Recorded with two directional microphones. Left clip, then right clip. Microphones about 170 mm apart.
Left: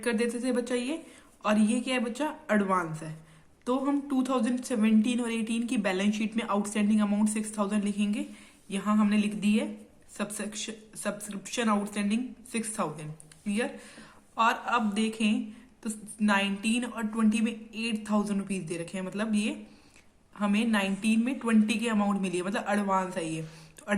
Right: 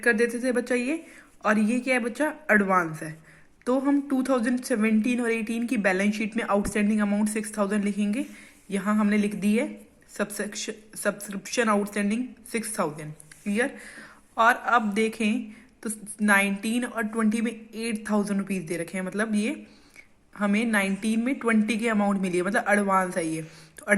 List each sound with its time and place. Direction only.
0.0 s a woman's voice: 35° right (ahead or behind)
23.8 s music: 35° right (ahead or behind)